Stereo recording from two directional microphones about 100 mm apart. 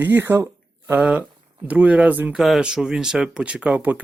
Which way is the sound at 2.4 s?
5° right (ahead or behind).